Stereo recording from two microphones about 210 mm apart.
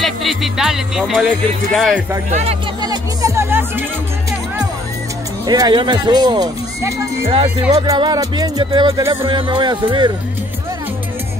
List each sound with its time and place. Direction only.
0.0 s speech: centre (ahead or behind)
2.3 s music: 25° right (ahead or behind)
5.5 s music: 20° right (ahead or behind)